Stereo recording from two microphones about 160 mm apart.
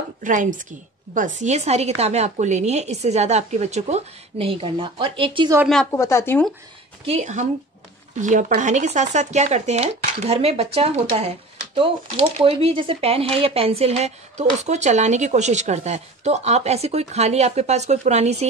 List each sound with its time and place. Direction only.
0.2 s speech: 55° right (ahead or behind); by 5.5 s 35° right (ahead or behind)
5.9 s speech: 15° left (ahead or behind)
7.1 s speech: 45° right (ahead or behind)